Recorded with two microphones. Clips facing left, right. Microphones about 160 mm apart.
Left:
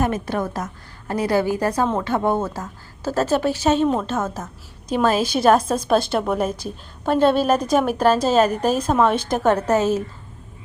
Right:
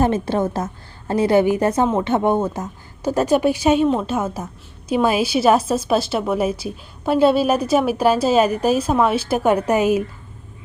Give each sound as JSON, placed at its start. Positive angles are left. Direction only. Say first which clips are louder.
{"t": 0.0, "sound": "a woman's voice", "louder": "right 4 dB", "side_deg": -25}